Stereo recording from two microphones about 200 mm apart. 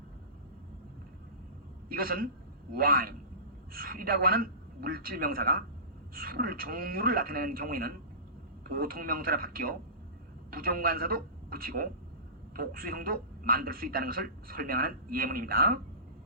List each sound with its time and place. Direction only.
1.9 s a man's voice: 45° right (ahead or behind)